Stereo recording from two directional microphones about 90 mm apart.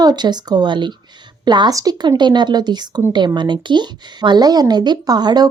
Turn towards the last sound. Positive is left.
turn(degrees=-50)  # may be behind; listen again after turning